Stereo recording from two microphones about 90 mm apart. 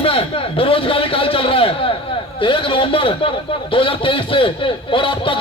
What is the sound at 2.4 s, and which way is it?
A man's voice, 70° left (ahead or behind).